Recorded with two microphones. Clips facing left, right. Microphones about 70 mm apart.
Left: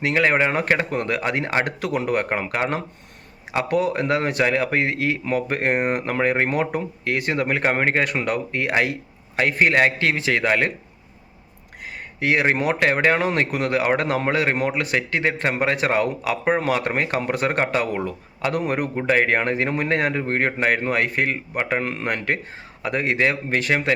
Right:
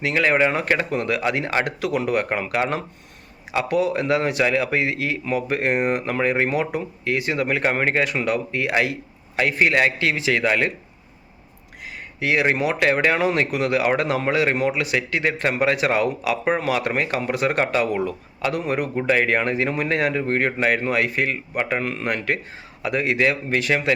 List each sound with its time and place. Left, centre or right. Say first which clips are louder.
0.0 s speech: even; left
12.2 s speech: even; left